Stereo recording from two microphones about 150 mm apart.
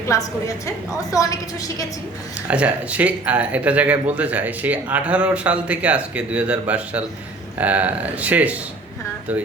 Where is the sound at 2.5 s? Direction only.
10° right (ahead or behind).